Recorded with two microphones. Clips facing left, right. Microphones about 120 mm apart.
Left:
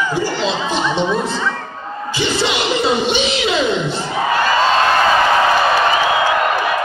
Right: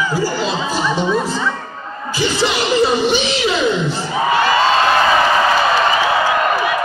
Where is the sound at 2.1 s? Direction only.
25° left (ahead or behind).